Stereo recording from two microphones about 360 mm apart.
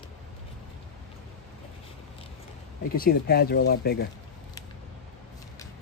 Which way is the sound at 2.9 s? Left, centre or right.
Left.